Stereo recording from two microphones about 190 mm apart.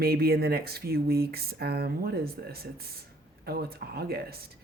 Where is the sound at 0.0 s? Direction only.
55° right (ahead or behind).